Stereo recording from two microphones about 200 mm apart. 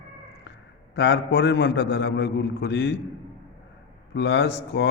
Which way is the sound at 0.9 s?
55° left (ahead or behind).